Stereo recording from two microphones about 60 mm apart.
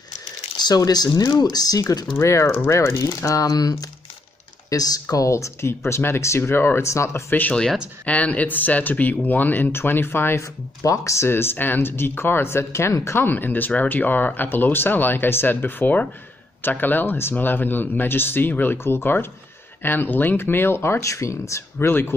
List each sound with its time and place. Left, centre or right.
0.7 s speech: left
2.1 s speech: left
3.1 s speech: left
5.1 s speech: left
7.2 s speech: left
10.8 s speech: left
11.2 s speech: left
13.2 s speech: left
21.7 s speech: left